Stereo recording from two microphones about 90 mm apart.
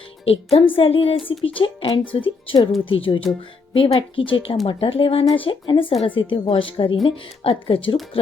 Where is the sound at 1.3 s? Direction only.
75° left (ahead or behind).